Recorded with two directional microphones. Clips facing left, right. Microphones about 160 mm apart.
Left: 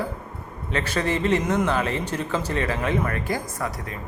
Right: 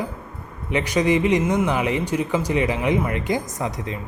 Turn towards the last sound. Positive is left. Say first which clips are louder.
# right 3 dB
turn(degrees=-20)  # may be behind; listen again after turning